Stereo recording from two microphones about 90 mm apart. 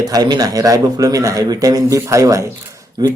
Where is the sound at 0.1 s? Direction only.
45° right (ahead or behind).